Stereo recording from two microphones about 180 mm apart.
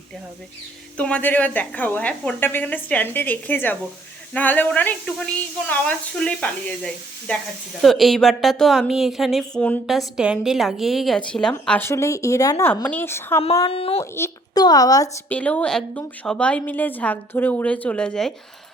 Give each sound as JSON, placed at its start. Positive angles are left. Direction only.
{"t": 0.9, "sound": "a woman's voice", "side_deg": 5}
{"t": 13.7, "sound": "speech", "side_deg": 30}
{"t": 14.0, "sound": "speech", "side_deg": 15}
{"t": 15.3, "sound": "a woman's voice", "side_deg": 10}